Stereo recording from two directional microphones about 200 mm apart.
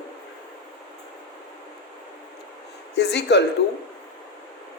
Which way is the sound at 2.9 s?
60° left (ahead or behind).